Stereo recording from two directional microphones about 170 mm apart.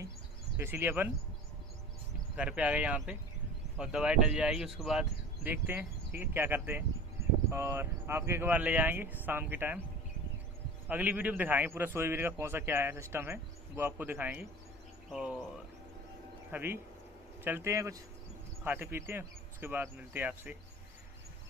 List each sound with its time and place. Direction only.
0.6 s a man's voice: 15° right (ahead or behind)
2.3 s a man's voice: 5° right (ahead or behind)
10.9 s a man's voice: 10° right (ahead or behind)
16.5 s a man's voice: 15° right (ahead or behind)